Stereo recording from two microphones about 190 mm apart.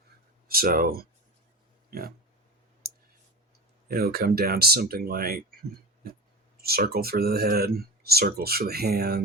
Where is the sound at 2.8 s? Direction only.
55° right (ahead or behind).